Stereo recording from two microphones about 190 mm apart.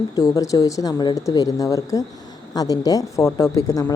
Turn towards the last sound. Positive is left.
turn(degrees=15)  # may be behind; listen again after turning